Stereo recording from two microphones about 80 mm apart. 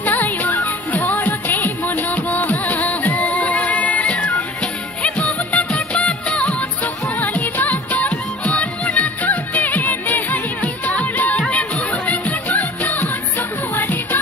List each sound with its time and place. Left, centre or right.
0.0 s music: left
5.0 s music of bollywood: centre
7.2 s music: left